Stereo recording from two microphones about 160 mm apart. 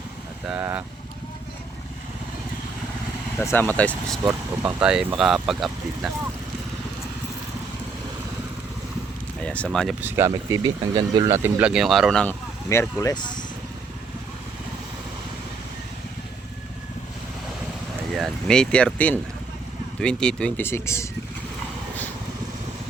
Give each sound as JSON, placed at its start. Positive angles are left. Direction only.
{"t": 0.4, "sound": "speech", "side_deg": -15}
{"t": 3.4, "sound": "speech", "side_deg": 15}
{"t": 4.2, "sound": "speech", "side_deg": -10}
{"t": 9.4, "sound": "speech", "side_deg": 5}
{"t": 10.0, "sound": "speech", "side_deg": -15}
{"t": 11.4, "sound": "speech", "side_deg": -10}
{"t": 13.0, "sound": "speech", "side_deg": 25}
{"t": 18.2, "sound": "speech", "side_deg": 5}